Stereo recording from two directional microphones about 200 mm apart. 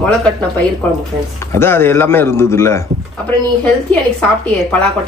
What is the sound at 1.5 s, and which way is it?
A man's voice, 10° left (ahead or behind).